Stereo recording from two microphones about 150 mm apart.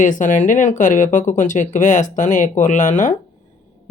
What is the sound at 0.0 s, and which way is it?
Speech, 60° left (ahead or behind).